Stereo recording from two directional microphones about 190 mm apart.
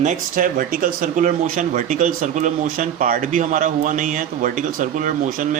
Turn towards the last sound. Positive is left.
turn(degrees=-45)  # may be behind; listen again after turning